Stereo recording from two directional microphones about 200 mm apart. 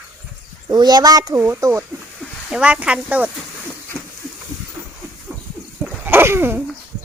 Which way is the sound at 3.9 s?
Centre (ahead or behind).